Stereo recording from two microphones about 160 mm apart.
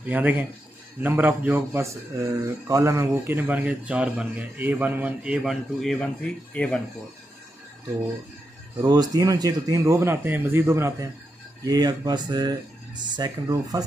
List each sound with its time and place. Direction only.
0.0 s speech: 10° right (ahead or behind); by 6.8 s 5° left (ahead or behind)
8.8 s speech: 25° right (ahead or behind)